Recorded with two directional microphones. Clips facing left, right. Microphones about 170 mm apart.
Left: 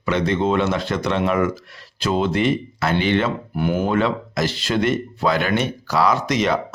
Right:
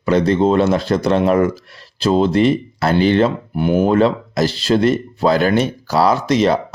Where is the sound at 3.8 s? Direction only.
35° right (ahead or behind).